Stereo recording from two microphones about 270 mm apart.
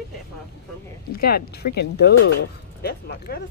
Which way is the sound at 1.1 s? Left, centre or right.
Left.